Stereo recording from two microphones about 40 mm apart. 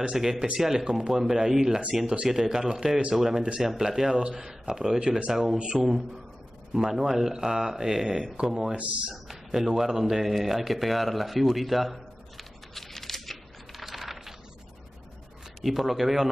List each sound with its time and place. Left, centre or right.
0.1 s speech: centre
5.3 s speech: centre
8.7 s speech: right
9.1 s a sound: centre
15.6 s speech: centre